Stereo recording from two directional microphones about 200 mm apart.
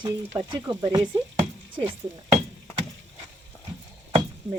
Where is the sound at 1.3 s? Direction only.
30° right (ahead or behind).